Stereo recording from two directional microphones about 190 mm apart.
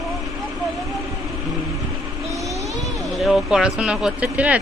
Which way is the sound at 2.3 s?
15° right (ahead or behind).